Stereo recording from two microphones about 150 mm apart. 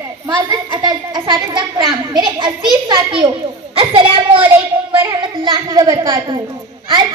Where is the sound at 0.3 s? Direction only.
25° right (ahead or behind).